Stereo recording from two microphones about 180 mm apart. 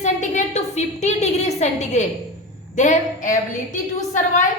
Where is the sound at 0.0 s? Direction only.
40° left (ahead or behind).